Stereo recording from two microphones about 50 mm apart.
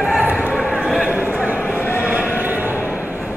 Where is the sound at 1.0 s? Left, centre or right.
Right.